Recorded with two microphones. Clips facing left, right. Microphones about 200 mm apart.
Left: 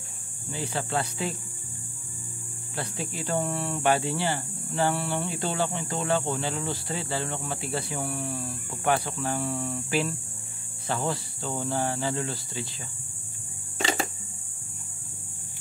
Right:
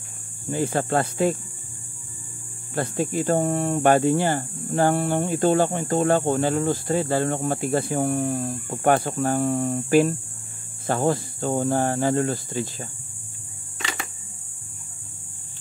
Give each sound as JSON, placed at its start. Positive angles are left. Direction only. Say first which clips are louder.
{"t": 0.5, "sound": "speech", "louder": "right 8 dB", "side_deg": -50}
{"t": 2.7, "sound": "speech", "louder": "right 10 dB", "side_deg": -50}
{"t": 13.7, "sound": "a sound", "louder": "left 6 dB", "side_deg": 30}